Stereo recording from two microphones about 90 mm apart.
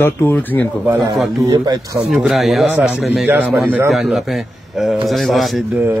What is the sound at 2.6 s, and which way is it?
Speech, 20° right (ahead or behind).